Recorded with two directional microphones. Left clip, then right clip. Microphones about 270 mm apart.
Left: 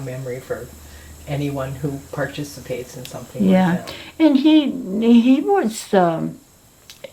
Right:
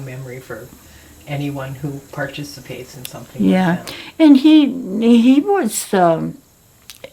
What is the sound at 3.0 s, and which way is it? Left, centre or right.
Speech, right.